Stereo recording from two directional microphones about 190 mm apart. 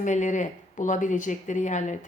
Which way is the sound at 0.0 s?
40° left (ahead or behind).